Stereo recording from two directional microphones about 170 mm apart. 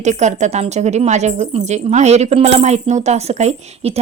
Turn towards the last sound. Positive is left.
turn(degrees=-40)  # may be behind; listen again after turning